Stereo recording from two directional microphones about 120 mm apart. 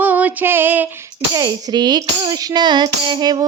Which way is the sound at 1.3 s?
30° right (ahead or behind).